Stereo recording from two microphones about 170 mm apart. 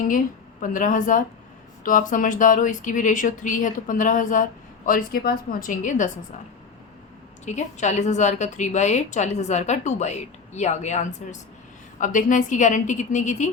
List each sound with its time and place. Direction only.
0.6 s a woman's voice: 50° left (ahead or behind)
7.4 s a woman's voice: 45° left (ahead or behind)